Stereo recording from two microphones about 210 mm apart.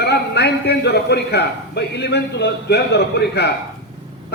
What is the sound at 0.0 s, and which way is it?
A man's voice, 50° left (ahead or behind).